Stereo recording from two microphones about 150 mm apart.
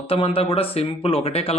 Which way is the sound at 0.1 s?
40° left (ahead or behind).